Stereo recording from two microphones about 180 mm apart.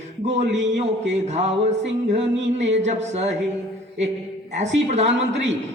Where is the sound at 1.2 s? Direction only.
40° right (ahead or behind).